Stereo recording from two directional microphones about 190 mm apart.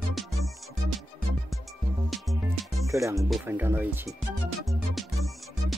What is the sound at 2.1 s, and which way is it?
Music, centre (ahead or behind).